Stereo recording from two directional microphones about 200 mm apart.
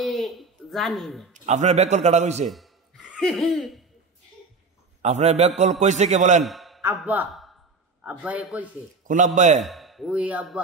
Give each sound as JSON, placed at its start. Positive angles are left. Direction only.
{"t": 0.0, "sound": "a sound", "side_deg": 0}
{"t": 1.3, "sound": "a man's voice", "side_deg": -35}
{"t": 2.4, "sound": "a sound", "side_deg": 0}
{"t": 5.0, "sound": "a man's voice", "side_deg": -35}
{"t": 6.4, "sound": "a man's voice", "side_deg": 0}
{"t": 9.0, "sound": "a man's voice", "side_deg": -40}
{"t": 9.6, "sound": "speech", "side_deg": 0}